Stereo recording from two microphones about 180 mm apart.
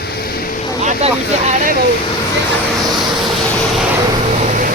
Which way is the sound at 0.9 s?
40° right (ahead or behind).